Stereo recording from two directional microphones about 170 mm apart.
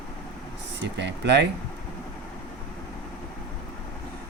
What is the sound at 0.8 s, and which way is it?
Speech, 90° right.